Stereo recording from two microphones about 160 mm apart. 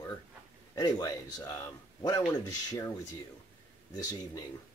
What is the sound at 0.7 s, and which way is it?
Speech, 25° left (ahead or behind).